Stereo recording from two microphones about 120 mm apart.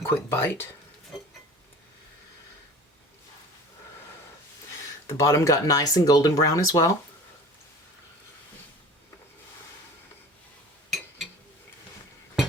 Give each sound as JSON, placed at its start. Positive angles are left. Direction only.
{"t": 0.0, "sound": "speech", "side_deg": 20}
{"t": 1.1, "sound": "a sound", "side_deg": 0}
{"t": 5.0, "sound": "speech", "side_deg": 25}